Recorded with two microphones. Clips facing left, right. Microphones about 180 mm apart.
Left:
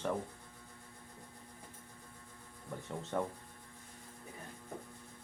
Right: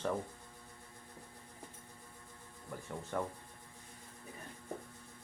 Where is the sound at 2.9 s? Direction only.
20° left (ahead or behind).